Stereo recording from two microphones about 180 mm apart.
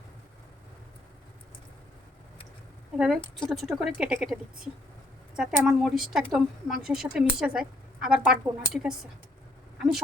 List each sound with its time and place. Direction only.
3.3 s a woman's voice: centre (ahead or behind)